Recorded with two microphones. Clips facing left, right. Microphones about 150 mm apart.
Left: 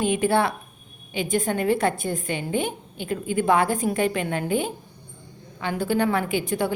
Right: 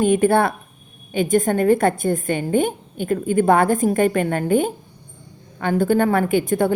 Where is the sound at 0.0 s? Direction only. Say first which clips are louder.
Right 5 dB; 50° right (ahead or behind).